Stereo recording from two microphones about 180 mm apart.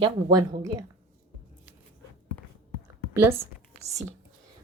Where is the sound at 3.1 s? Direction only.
15° right (ahead or behind).